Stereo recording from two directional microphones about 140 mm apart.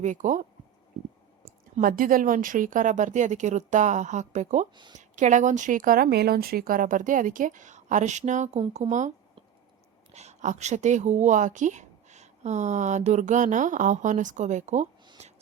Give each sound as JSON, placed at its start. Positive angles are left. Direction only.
{"t": 0.0, "sound": "speech", "side_deg": -65}
{"t": 1.8, "sound": "a woman's voice", "side_deg": -90}
{"t": 15.2, "sound": "whispering", "side_deg": -50}